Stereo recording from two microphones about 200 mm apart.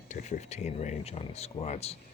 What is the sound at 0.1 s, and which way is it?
Speech, 35° left (ahead or behind).